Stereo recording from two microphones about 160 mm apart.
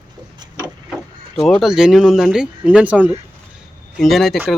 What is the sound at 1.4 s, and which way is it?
Speech, centre (ahead or behind).